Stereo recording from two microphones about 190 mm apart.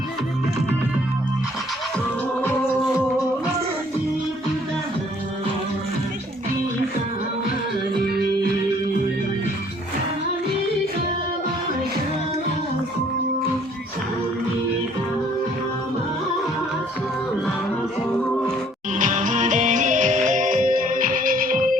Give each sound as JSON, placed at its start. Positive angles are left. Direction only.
{"t": 18.9, "sound": "music", "side_deg": -45}